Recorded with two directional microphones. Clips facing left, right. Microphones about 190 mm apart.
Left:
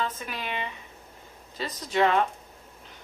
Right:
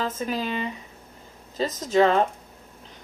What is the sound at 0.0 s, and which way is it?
Speech, 35° right (ahead or behind).